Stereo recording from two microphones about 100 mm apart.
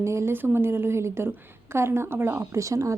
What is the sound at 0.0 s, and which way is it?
A woman's voice, 30° right (ahead or behind).